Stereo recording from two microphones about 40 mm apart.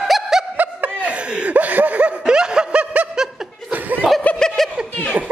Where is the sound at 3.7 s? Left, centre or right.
Right.